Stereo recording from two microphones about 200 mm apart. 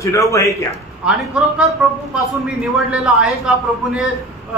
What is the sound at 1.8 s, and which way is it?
Speech, 5° right (ahead or behind).